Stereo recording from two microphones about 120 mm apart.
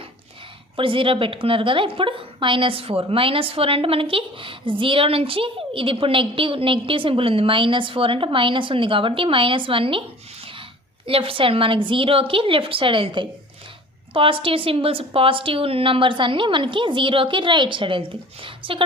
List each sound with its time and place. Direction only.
0.8 s a woman's voice: 45° right (ahead or behind)
11.0 s a woman's voice: 50° right (ahead or behind)